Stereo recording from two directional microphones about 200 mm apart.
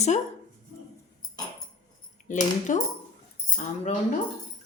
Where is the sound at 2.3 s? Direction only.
40° left (ahead or behind).